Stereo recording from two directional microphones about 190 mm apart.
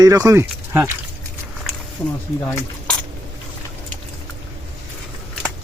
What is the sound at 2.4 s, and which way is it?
Speech, 10° left (ahead or behind).